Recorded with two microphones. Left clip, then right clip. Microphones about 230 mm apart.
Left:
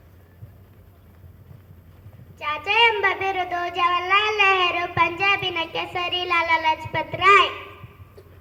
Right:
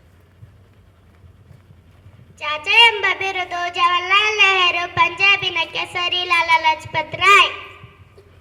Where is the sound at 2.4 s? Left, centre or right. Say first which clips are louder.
Right 5 dB; right.